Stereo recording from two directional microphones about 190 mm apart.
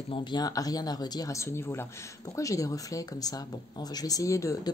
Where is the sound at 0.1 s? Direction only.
25° left (ahead or behind).